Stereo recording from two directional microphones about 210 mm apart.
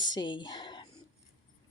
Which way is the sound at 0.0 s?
20° left (ahead or behind).